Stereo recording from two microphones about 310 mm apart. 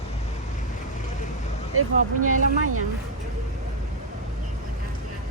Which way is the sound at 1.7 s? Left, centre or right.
Right.